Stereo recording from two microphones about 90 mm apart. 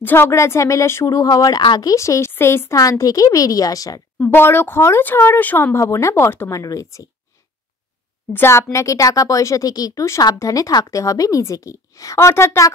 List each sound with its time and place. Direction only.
0.0 s speech: 25° left (ahead or behind); by 2.0 s 55° left (ahead or behind)
2.0 s speech: 35° left (ahead or behind)
2.7 s speech: 40° left (ahead or behind)
4.2 s speech: 25° left (ahead or behind)
8.3 s speech: 25° left (ahead or behind)
8.7 s speech: 35° left (ahead or behind)